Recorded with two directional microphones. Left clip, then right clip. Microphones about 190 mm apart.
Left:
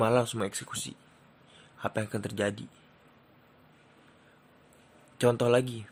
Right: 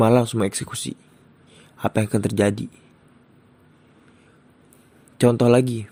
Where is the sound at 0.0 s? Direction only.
30° right (ahead or behind).